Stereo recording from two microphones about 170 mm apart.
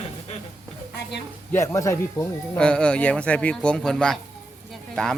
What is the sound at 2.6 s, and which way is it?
Speech, 5° left (ahead or behind).